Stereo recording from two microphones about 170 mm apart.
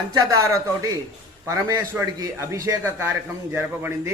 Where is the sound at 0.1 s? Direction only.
20° right (ahead or behind).